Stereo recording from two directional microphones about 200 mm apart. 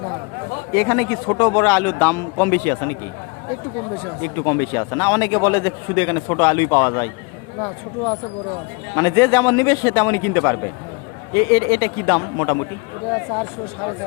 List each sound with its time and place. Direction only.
0.7 s a man's voice: 15° left (ahead or behind)
4.2 s a man's voice: 15° left (ahead or behind)
9.0 s a man's voice: 15° left (ahead or behind)